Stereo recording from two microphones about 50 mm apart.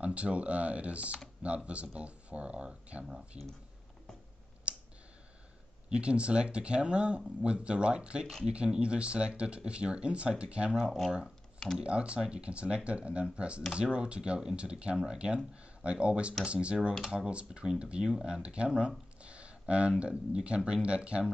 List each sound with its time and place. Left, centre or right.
0.0 s speech: right
4.7 s clicking: right
5.9 s speech: right
11.8 s speech: right